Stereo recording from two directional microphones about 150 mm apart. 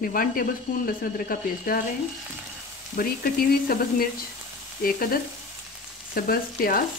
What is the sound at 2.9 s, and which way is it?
Frying, 85° left.